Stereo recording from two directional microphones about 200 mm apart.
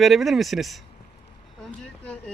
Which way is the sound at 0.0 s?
Centre (ahead or behind).